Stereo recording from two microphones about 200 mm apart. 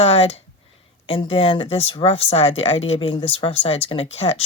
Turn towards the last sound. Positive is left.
turn(degrees=30)  # may be behind; listen again after turning